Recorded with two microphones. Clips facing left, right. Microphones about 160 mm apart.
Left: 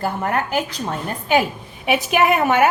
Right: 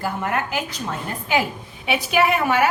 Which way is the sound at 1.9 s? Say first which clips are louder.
Left 2 dB; 45° left (ahead or behind).